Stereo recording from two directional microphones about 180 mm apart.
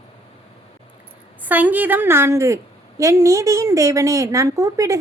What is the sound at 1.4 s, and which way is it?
A woman's voice, 10° right (ahead or behind).